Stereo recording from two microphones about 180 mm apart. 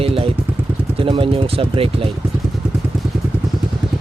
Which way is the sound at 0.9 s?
30° right (ahead or behind).